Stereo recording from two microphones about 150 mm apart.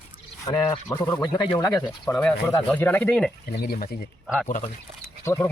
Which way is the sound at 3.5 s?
85° left.